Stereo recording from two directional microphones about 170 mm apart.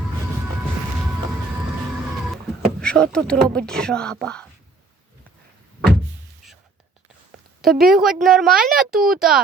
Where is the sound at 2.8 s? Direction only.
5° left (ahead or behind).